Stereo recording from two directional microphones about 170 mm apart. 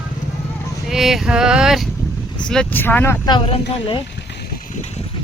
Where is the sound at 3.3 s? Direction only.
30° left (ahead or behind).